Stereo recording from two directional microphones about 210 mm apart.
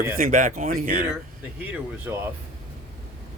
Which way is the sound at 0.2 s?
40° right (ahead or behind).